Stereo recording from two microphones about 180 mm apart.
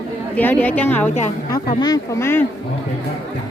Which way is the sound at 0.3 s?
10° left (ahead or behind).